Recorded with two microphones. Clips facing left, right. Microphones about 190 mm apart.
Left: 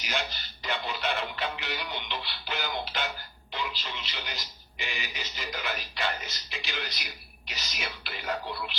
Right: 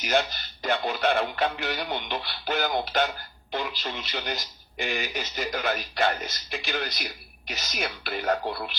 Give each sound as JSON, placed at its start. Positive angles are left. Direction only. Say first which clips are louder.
{"t": 0.0, "sound": "speech", "louder": "right 8 dB", "side_deg": -50}